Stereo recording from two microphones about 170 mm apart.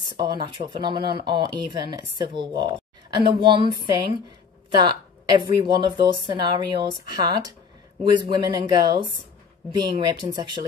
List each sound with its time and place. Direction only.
0.0 s a woman's voice: 25° right (ahead or behind)